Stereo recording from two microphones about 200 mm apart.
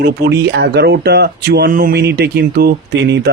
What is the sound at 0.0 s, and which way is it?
Speech, 55° right (ahead or behind).